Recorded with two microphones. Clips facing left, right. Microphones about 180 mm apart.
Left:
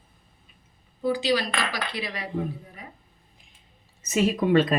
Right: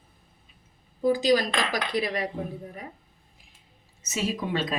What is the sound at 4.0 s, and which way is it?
Speech, 55° left (ahead or behind).